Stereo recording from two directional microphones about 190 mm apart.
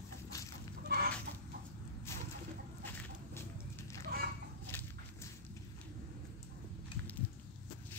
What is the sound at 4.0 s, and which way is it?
Chicken, 50° right (ahead or behind).